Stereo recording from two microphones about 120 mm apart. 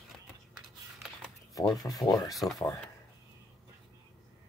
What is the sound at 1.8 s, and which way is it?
Speech, 30° left (ahead or behind).